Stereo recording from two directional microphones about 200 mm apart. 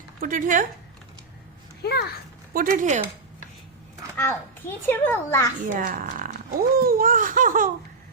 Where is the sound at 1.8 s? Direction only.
55° left (ahead or behind).